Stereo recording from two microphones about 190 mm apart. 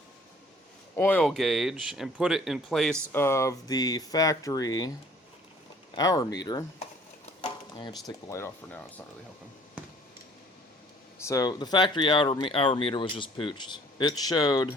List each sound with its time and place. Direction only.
0.9 s speech: 10° left (ahead or behind)
3.1 s speech: 15° left (ahead or behind)
5.9 s speech: 20° left (ahead or behind)
11.2 s speech: 15° left (ahead or behind)